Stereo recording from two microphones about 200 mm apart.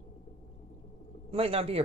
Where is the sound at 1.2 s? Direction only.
30° right (ahead or behind).